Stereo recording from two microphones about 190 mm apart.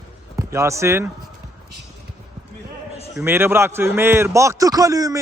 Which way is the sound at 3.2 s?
10° right (ahead or behind).